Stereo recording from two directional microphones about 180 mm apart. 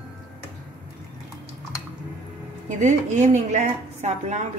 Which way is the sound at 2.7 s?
45° right (ahead or behind).